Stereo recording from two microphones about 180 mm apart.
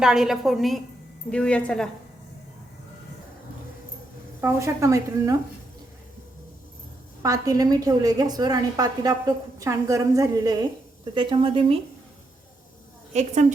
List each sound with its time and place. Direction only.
0.0 s a woman's voice: 5° right (ahead or behind)
4.4 s speech: 15° right (ahead or behind)
7.2 s a woman's voice: 20° right (ahead or behind)
13.1 s a woman's voice: 40° right (ahead or behind)